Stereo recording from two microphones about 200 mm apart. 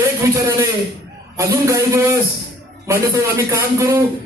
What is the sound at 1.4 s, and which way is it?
A man's voice, 15° right (ahead or behind).